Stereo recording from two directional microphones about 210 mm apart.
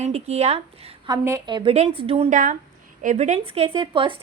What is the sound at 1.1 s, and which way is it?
A woman's voice, 15° right (ahead or behind).